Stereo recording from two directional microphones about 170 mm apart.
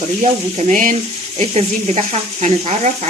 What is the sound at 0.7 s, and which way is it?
Speech, 50° right (ahead or behind).